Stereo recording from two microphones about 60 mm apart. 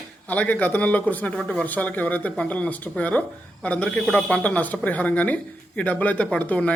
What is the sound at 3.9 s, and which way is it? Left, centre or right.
Speech, centre.